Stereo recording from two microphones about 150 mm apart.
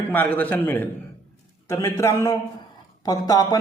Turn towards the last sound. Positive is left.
turn(degrees=25)  # may be behind; listen again after turning